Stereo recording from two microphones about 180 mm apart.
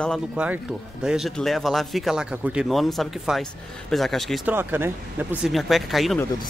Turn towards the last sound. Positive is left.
turn(degrees=0)  # may be behind; listen again after turning